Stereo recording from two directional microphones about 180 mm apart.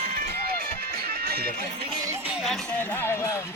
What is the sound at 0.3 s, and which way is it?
Music, 55° right (ahead or behind).